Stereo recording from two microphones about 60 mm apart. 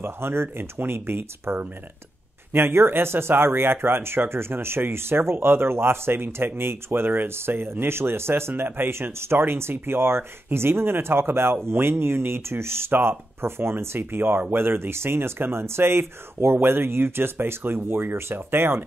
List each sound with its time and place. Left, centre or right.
0.0 s speech: right